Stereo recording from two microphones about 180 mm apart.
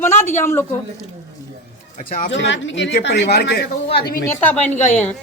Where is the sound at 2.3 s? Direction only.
90° left; by 3.7 s 65° left (ahead or behind).